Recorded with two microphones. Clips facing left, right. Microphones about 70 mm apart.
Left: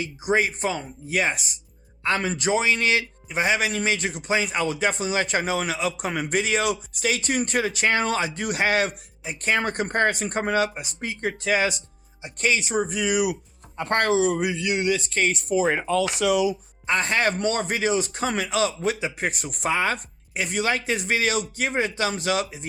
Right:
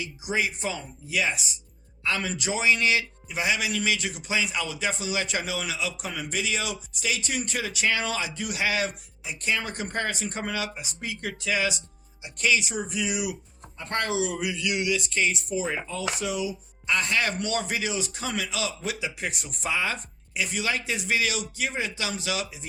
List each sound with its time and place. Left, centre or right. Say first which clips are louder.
0.0 s a man's voice: left 5 dB; left
14.2 s a man's voice: left 6 dB; left
16.8 s a man's voice: left 3 dB; left